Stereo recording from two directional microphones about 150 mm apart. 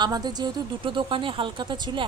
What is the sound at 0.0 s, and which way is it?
A woman's voice, 25° right (ahead or behind).